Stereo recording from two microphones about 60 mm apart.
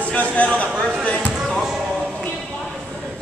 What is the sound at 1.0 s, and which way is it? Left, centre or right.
Basketball bounce, left.